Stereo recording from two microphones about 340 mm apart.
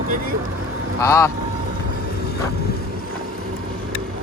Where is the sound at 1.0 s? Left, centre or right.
Centre.